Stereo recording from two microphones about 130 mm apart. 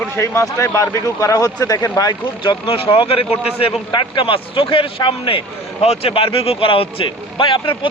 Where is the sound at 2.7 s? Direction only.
45° left (ahead or behind).